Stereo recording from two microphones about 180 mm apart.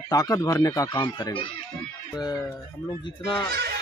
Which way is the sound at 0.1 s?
20° left (ahead or behind).